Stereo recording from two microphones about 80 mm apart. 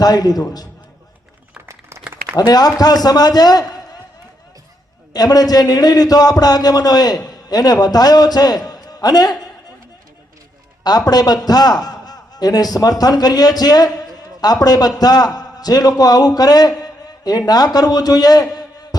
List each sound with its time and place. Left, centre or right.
0.0 s a man's voice: left
2.3 s a man's voice: left
5.1 s a man's voice: left
10.8 s a man's voice: left